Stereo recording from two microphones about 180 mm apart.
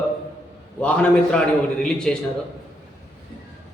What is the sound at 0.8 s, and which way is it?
A man's voice, 5° left (ahead or behind).